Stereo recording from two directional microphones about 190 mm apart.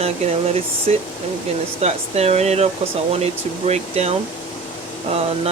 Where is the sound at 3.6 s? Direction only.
35° right (ahead or behind).